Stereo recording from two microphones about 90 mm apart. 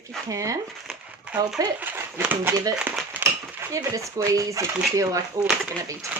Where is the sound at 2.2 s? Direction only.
20° right (ahead or behind).